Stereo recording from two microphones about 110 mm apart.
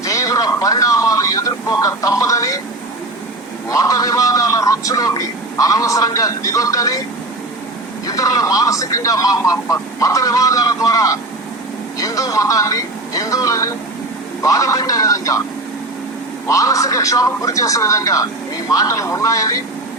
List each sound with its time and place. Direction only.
0.0 s speech: 30° left (ahead or behind)
3.7 s speech: 30° left (ahead or behind)
8.0 s speech: 30° left (ahead or behind)
16.5 s speech: 30° left (ahead or behind)